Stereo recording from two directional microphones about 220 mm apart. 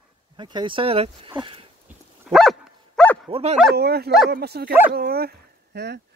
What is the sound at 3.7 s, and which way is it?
Speech, 45° right (ahead or behind).